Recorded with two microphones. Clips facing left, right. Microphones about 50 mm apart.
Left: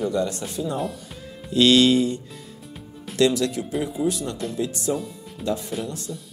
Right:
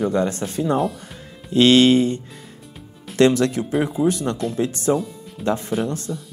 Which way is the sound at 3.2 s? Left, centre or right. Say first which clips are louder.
Right 4 dB; right.